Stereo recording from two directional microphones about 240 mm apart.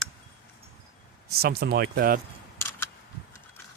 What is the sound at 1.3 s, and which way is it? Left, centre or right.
Speech, right.